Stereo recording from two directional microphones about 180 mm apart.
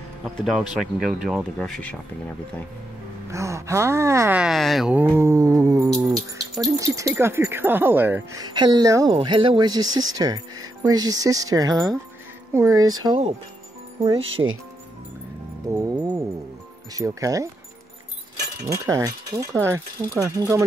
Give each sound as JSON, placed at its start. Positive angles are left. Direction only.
{"t": 0.2, "sound": "speech", "side_deg": 0}
{"t": 3.3, "sound": "speech", "side_deg": -15}
{"t": 8.5, "sound": "speech", "side_deg": -25}
{"t": 15.7, "sound": "music", "side_deg": -20}
{"t": 16.9, "sound": "speech", "side_deg": -15}
{"t": 18.7, "sound": "speech", "side_deg": -20}